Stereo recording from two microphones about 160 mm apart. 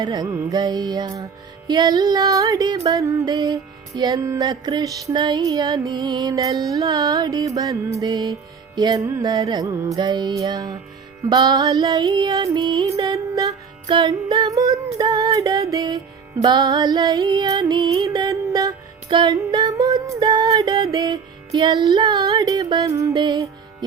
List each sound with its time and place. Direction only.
0.0 s music: 25° right (ahead or behind)